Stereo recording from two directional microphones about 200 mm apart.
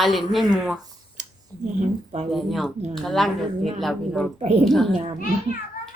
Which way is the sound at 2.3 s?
Centre (ahead or behind).